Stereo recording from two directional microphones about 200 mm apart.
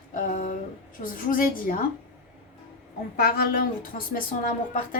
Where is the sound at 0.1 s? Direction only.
40° left (ahead or behind).